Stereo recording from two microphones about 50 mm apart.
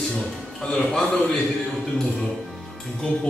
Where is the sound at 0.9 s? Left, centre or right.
Centre.